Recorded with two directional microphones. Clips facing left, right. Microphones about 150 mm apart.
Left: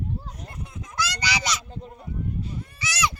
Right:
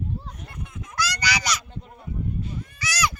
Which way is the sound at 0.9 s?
25° left (ahead or behind).